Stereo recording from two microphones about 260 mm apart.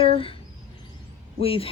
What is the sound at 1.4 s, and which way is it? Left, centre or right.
Speech, left.